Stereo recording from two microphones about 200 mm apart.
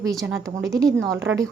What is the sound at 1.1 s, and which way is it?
Speech, 70° right (ahead or behind).